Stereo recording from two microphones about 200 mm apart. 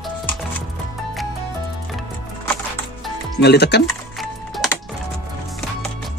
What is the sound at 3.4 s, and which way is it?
Speech, 55° left (ahead or behind).